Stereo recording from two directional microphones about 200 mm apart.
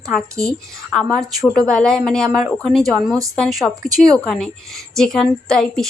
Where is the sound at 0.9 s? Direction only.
5° left (ahead or behind).